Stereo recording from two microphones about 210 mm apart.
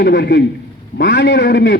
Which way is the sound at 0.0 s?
55° left (ahead or behind).